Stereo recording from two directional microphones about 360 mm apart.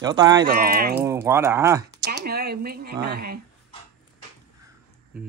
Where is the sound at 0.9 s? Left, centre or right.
Centre.